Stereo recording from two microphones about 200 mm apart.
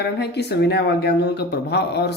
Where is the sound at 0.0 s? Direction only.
55° left (ahead or behind).